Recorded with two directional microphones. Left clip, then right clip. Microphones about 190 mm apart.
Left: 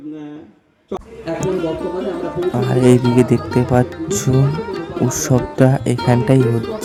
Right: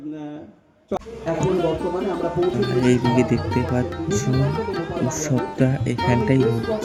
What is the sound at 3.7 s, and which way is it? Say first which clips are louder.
Speech: left 6 dB; 35° left (ahead or behind).